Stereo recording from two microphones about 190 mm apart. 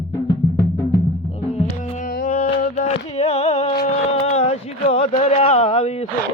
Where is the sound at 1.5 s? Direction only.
40° left (ahead or behind).